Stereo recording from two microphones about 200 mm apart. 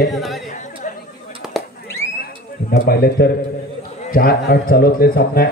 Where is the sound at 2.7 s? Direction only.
50° left (ahead or behind).